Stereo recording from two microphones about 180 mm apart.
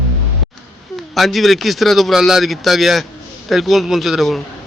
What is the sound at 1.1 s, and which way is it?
Speech, centre (ahead or behind).